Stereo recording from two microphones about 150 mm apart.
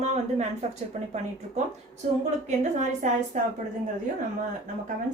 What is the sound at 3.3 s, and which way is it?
Speech, 55° right (ahead or behind).